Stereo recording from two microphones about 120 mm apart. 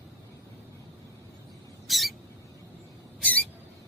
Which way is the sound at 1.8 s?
Centre (ahead or behind).